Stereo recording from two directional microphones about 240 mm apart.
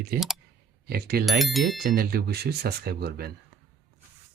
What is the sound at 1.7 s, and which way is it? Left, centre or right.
Speech, right.